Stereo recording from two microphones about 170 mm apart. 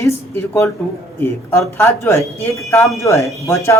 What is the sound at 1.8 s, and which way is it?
A man's voice, 15° left (ahead or behind).